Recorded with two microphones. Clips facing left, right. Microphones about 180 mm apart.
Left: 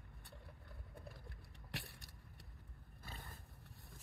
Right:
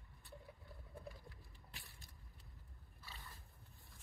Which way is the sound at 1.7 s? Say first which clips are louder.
Left 12 dB; 70° left (ahead or behind).